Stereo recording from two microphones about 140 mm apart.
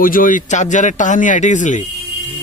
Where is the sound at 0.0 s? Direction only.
80° left.